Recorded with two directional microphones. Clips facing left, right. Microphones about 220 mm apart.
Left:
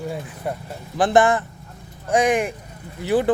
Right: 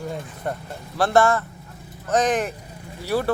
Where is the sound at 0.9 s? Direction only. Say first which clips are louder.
Left 2 dB; 15° left (ahead or behind).